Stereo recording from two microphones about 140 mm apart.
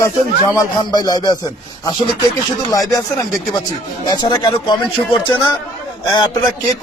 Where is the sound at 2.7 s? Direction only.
25° left (ahead or behind).